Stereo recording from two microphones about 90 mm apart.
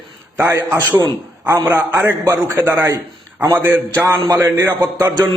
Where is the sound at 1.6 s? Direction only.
25° right (ahead or behind).